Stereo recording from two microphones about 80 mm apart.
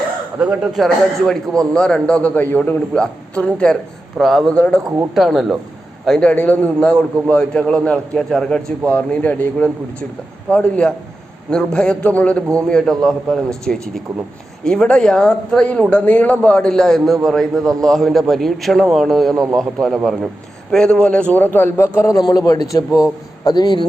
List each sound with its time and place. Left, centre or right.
0.3 s speech: centre
0.9 s a man's voice: centre
4.2 s a man's voice: centre
4.5 s a man's voice: centre
5.1 s a man's voice: centre
6.1 s a man's voice: centre
22.2 s a man's voice: left
23.4 s speech: left